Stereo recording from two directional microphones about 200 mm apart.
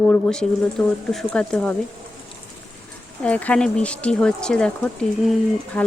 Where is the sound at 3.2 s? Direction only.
5° left (ahead or behind).